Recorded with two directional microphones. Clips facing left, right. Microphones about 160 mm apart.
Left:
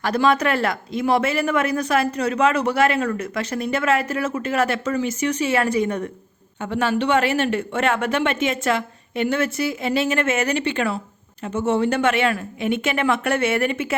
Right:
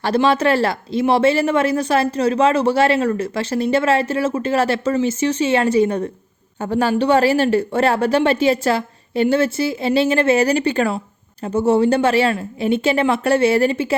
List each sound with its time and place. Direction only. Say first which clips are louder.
0.0 s a woman's voice: right 3 dB; 30° right (ahead or behind)